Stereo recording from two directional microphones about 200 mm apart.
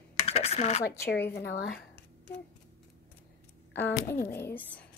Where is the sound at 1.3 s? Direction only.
55° left (ahead or behind).